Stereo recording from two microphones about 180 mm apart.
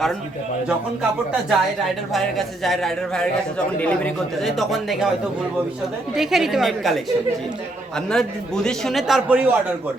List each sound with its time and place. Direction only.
1.5 s a man's voice: centre (ahead or behind)
6.1 s a man's voice: centre (ahead or behind)